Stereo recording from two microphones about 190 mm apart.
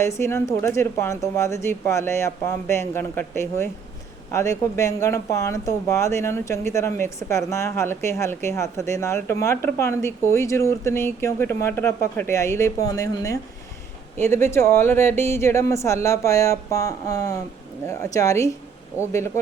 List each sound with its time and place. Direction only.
0.2 s speech: 15° left (ahead or behind)